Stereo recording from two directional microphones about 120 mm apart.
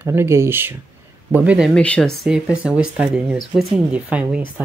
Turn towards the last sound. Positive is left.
turn(degrees=-10)  # may be behind; listen again after turning